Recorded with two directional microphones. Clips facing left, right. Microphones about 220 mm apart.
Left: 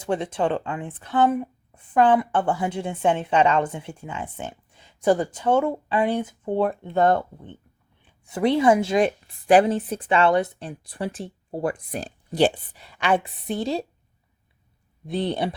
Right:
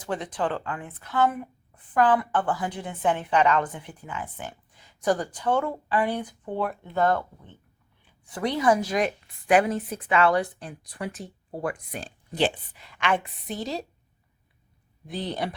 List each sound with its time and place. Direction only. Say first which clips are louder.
0.0 s speech: left 5 dB; 25° left (ahead or behind)
15.0 s speech: left 6 dB; 25° left (ahead or behind)